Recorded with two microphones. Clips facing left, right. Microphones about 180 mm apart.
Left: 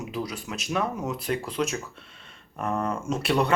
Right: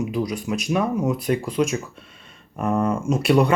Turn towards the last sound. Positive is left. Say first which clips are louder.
# right 6 dB
turn(degrees=-10)  # may be behind; listen again after turning